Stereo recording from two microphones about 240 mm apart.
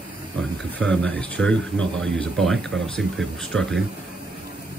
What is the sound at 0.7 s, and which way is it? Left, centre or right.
Speech, centre.